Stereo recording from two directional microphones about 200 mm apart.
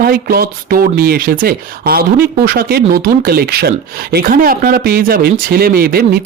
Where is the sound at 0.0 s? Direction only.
50° right (ahead or behind).